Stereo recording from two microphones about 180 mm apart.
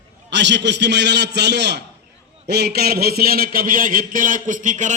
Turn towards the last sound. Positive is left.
turn(degrees=-45)  # may be behind; listen again after turning